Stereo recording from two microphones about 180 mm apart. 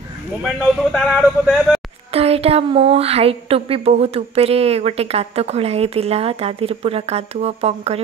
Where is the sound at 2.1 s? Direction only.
35° right (ahead or behind).